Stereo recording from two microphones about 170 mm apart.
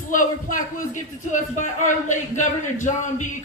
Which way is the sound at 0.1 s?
50° left (ahead or behind).